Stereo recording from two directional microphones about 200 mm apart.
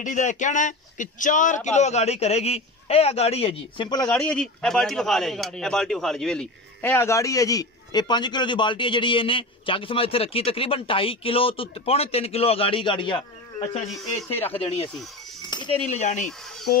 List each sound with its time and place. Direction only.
0.0 s speech: 35° left (ahead or behind); by 4.1 s 20° left (ahead or behind)
4.1 s speech: 5° left (ahead or behind); by 13.8 s 25° left (ahead or behind)
15.8 s speech: 35° left (ahead or behind)